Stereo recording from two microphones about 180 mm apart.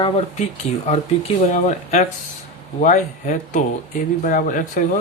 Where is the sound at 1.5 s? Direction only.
40° left (ahead or behind).